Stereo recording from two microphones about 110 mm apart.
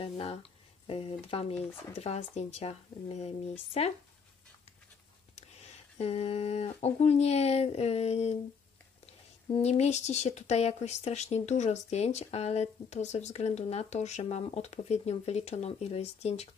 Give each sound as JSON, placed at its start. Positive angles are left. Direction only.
{"t": 0.0, "sound": "speech", "side_deg": 65}
{"t": 1.7, "sound": "speech", "side_deg": 20}
{"t": 2.0, "sound": "speech", "side_deg": 70}
{"t": 5.3, "sound": "speech", "side_deg": 75}
{"t": 9.0, "sound": "speech", "side_deg": 70}